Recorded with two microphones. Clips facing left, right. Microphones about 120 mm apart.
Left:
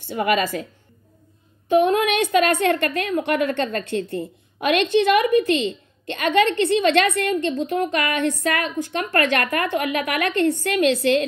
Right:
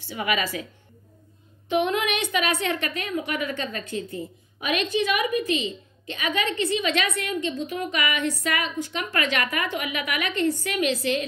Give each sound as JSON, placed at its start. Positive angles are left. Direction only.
{"t": 0.0, "sound": "speech", "side_deg": 45}
{"t": 1.7, "sound": "a woman's voice", "side_deg": 45}